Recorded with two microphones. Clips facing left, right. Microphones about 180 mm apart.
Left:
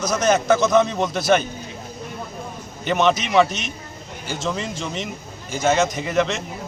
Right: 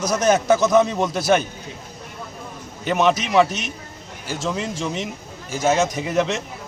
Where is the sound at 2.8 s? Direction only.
5° right (ahead or behind).